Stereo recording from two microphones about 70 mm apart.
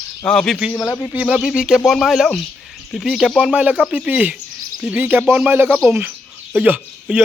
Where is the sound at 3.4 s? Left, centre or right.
Centre.